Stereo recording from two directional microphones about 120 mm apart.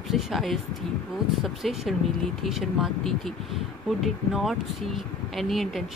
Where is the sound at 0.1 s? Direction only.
Centre (ahead or behind).